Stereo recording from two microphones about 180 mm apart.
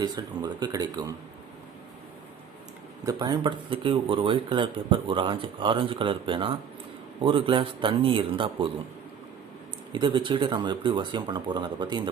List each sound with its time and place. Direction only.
0.0 s speech: 20° right (ahead or behind)
3.1 s speech: 25° right (ahead or behind)
9.9 s speech: 25° right (ahead or behind)